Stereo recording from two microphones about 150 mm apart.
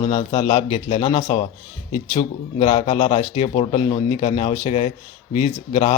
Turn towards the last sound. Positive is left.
turn(degrees=40)  # may be behind; listen again after turning